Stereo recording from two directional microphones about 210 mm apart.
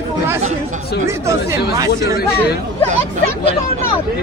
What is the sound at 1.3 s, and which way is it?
Speech, 15° right (ahead or behind).